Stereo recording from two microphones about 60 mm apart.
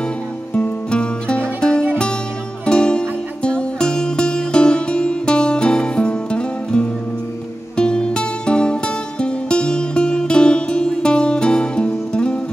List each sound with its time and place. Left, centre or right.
0.6 s music: centre